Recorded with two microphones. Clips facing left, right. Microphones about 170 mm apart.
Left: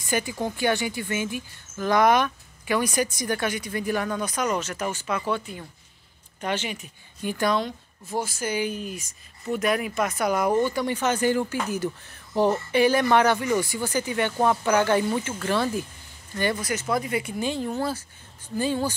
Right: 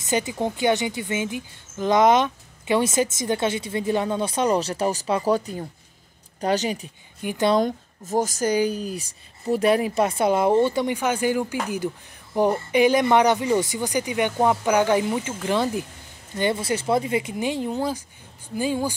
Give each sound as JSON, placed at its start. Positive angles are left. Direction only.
{"t": 0.0, "sound": "speech", "side_deg": -20}
{"t": 7.2, "sound": "a woman's voice", "side_deg": -15}
{"t": 7.5, "sound": "speech", "side_deg": -45}
{"t": 11.0, "sound": "speech", "side_deg": -10}